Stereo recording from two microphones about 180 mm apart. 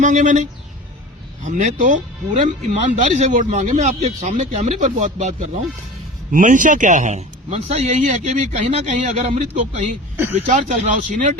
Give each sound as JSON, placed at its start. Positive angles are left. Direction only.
{"t": 0.0, "sound": "speech", "side_deg": -45}
{"t": 1.5, "sound": "a man's voice", "side_deg": -40}